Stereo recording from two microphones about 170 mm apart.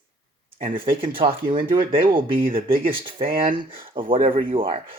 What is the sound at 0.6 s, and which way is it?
Speech, 30° right (ahead or behind).